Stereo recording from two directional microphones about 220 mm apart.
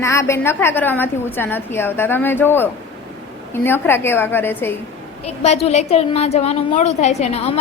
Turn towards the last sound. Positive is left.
turn(degrees=30)  # may be behind; listen again after turning